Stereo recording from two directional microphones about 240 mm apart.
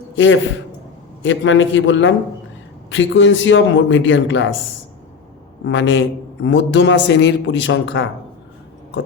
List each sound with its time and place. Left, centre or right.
1.2 s a man's voice: left
5.6 s a man's voice: left